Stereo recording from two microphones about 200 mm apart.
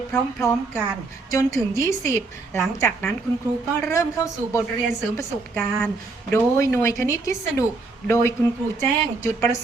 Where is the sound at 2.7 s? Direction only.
10° left (ahead or behind).